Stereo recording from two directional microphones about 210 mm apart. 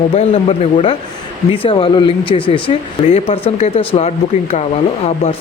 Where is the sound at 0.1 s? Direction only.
30° left (ahead or behind).